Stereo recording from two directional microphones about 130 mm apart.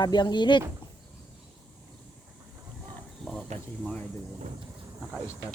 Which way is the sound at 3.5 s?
60° right (ahead or behind).